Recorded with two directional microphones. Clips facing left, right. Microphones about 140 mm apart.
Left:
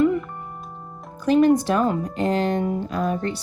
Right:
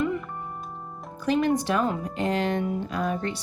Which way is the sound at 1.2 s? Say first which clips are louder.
Left 7 dB; 40° left (ahead or behind).